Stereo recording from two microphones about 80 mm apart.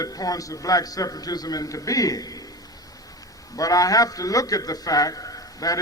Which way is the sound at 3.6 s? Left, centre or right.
Left.